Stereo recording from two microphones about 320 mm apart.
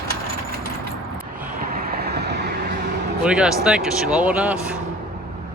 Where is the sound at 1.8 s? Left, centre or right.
Right.